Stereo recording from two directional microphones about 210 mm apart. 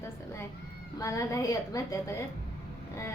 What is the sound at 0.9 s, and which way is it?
A woman's voice, 15° left (ahead or behind).